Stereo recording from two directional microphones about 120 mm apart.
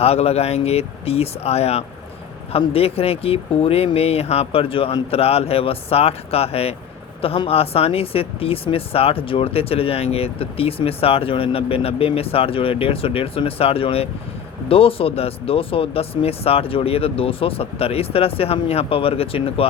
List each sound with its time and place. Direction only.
0.0 s speech: 60° left (ahead or behind)